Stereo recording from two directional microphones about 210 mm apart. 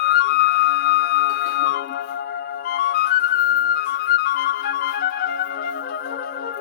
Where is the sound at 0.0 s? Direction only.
50° left (ahead or behind).